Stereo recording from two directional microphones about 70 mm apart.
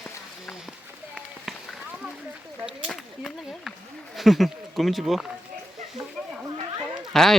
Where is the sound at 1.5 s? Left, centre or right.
Centre.